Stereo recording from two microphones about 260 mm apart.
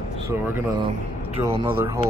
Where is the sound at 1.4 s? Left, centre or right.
Centre.